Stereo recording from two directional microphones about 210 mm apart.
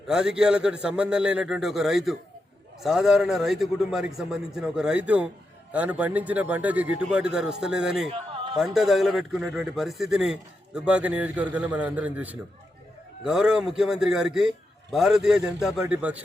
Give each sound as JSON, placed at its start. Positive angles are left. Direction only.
{"t": 0.1, "sound": "a man's voice", "side_deg": -5}
{"t": 8.1, "sound": "a sound", "side_deg": -25}
{"t": 8.5, "sound": "a man's voice", "side_deg": 0}